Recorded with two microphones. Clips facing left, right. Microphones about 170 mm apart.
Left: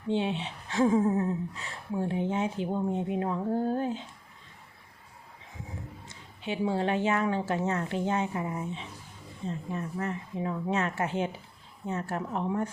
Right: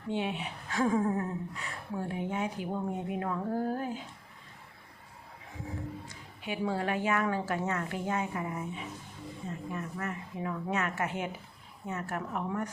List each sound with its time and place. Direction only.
0.1 s speech: 30° left (ahead or behind)
6.1 s speech: 25° left (ahead or behind)